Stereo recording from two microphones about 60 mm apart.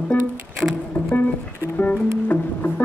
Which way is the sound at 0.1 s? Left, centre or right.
Left.